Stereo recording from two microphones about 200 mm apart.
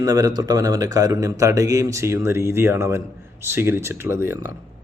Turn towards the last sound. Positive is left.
turn(degrees=-10)  # may be behind; listen again after turning